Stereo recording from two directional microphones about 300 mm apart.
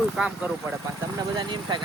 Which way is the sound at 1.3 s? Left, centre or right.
Centre.